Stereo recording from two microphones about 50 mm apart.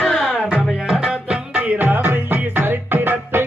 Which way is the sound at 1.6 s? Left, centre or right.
Right.